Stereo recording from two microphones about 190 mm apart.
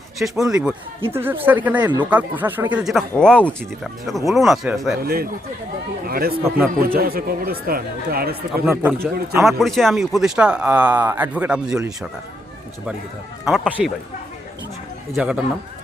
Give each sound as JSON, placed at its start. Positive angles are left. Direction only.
{"t": 0.2, "sound": "a man's voice", "side_deg": -10}
{"t": 4.9, "sound": "speech", "side_deg": -50}
{"t": 8.6, "sound": "a man's voice", "side_deg": -10}
{"t": 13.4, "sound": "a man's voice", "side_deg": -5}
{"t": 15.1, "sound": "speech", "side_deg": -5}